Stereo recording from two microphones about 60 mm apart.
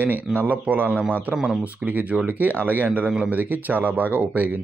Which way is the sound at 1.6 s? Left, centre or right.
Right.